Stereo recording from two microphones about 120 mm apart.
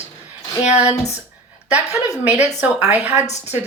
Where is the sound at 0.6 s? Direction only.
65° left (ahead or behind).